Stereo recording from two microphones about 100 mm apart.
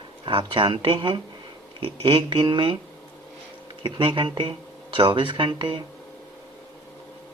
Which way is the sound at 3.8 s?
60° right (ahead or behind).